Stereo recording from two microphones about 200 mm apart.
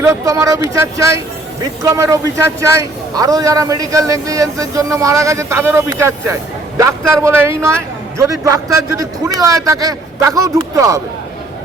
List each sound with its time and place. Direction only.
0.0 s a man's voice: 15° right (ahead or behind)